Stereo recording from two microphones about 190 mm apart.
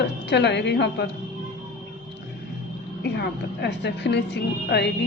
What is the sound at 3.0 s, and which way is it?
A woman's voice, 60° left (ahead or behind).